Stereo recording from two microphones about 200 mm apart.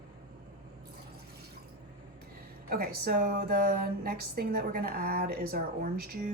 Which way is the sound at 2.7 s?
50° right (ahead or behind).